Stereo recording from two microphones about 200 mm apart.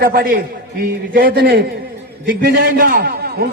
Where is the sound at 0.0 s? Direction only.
50° right (ahead or behind).